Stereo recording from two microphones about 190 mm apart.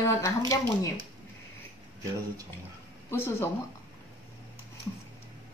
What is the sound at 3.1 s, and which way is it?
Speech, 10° left (ahead or behind).